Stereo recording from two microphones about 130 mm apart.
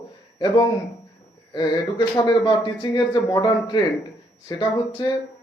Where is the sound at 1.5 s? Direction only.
35° left (ahead or behind).